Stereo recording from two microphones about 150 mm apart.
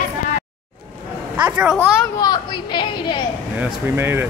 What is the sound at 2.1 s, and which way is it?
A woman's voice, 30° left (ahead or behind).